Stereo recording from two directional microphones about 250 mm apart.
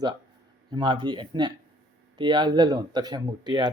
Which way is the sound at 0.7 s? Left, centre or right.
Centre.